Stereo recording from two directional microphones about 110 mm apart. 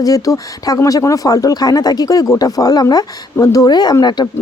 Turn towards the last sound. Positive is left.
turn(degrees=40)  # may be behind; listen again after turning